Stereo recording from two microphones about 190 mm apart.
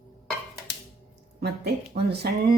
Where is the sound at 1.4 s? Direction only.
55° right (ahead or behind).